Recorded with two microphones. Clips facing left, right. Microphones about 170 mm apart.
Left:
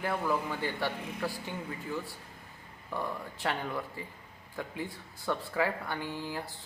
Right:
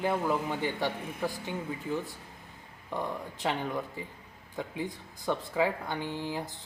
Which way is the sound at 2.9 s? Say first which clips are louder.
Right 2 dB; 20° right (ahead or behind).